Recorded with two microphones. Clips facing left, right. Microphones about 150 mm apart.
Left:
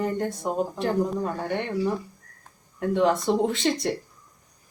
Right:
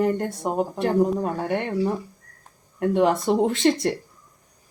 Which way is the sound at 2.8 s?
55° right (ahead or behind).